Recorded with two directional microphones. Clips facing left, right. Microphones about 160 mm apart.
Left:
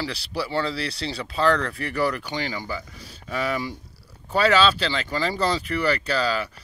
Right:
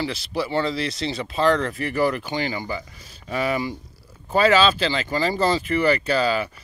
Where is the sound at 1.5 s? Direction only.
25° right (ahead or behind).